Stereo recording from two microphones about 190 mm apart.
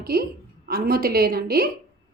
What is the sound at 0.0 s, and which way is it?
A woman's voice, 50° right (ahead or behind).